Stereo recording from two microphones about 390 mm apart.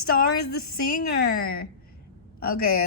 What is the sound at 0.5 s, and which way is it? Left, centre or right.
Speech, left.